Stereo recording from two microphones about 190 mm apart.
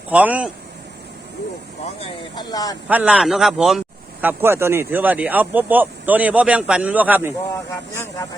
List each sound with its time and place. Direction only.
0.1 s speech: 5° right (ahead or behind)
2.0 s speech: 25° left (ahead or behind)
2.8 s speech: 5° right (ahead or behind)